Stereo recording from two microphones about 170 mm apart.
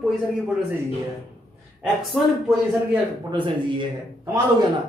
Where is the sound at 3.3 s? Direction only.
25° right (ahead or behind).